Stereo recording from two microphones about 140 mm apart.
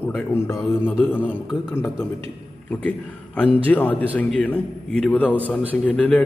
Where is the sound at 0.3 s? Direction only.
15° left (ahead or behind).